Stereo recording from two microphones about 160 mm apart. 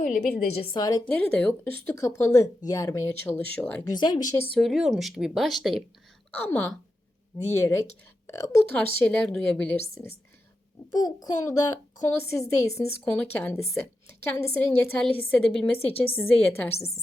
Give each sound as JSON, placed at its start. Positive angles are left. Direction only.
{"t": 0.0, "sound": "a woman's voice", "side_deg": 50}
{"t": 1.0, "sound": "a woman's voice", "side_deg": 10}
{"t": 3.9, "sound": "a child's voice", "side_deg": 25}
{"t": 4.5, "sound": "speech", "side_deg": 0}
{"t": 6.3, "sound": "a woman's voice", "side_deg": 10}
{"t": 8.7, "sound": "a woman's voice", "side_deg": 10}
{"t": 11.0, "sound": "a child's voice", "side_deg": 25}
{"t": 14.3, "sound": "a woman's voice", "side_deg": 15}